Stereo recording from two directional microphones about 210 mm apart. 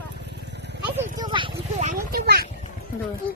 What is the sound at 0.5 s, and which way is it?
Vehicle, 55° right (ahead or behind).